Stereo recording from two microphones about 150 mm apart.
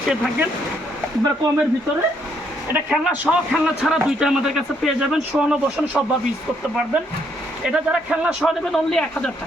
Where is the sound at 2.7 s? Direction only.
10° right (ahead or behind).